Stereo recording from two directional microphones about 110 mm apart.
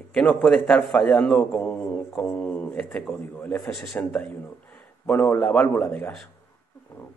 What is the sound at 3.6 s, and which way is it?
A man's voice, centre (ahead or behind).